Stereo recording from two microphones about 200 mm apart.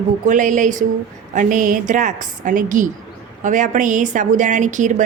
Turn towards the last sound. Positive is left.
turn(degrees=-40)  # may be behind; listen again after turning